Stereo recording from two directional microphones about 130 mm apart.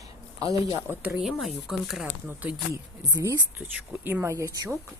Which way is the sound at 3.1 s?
25° right (ahead or behind).